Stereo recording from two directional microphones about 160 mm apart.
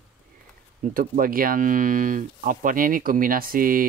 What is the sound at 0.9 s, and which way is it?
Speech, 60° right (ahead or behind).